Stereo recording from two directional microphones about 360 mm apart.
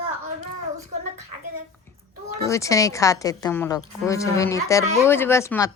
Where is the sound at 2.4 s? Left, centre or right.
Centre.